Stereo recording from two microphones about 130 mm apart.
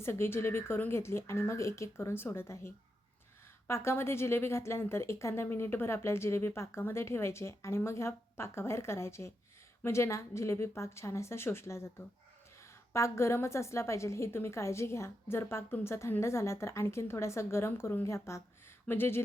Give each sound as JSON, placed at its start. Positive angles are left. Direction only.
{"t": 0.0, "sound": "a woman's voice", "side_deg": 20}